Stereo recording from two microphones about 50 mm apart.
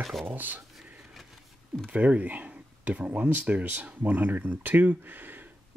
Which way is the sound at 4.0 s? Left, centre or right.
Right.